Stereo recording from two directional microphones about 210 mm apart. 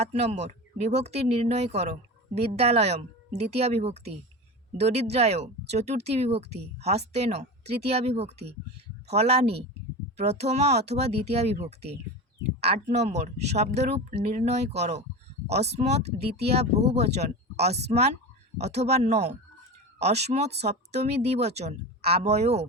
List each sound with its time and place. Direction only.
0.0 s speech: 30° right (ahead or behind)